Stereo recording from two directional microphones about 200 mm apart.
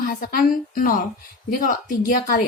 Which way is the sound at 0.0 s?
45° left (ahead or behind).